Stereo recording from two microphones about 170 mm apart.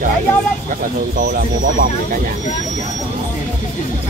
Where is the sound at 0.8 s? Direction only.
55° right (ahead or behind).